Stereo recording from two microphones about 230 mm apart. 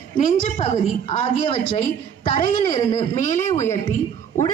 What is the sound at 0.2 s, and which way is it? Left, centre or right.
Speech, left.